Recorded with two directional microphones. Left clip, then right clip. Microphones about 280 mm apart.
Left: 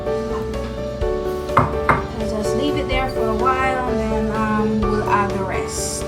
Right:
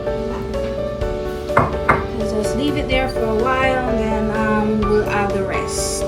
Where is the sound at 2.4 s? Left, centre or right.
Left.